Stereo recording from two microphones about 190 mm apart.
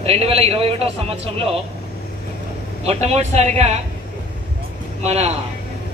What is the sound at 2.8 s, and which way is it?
Speech, 35° right (ahead or behind).